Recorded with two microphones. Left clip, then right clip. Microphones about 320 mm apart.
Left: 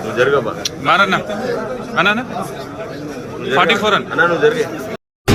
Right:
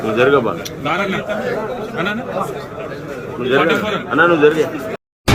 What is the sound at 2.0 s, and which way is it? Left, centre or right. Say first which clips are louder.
Speech: left 8 dB; centre.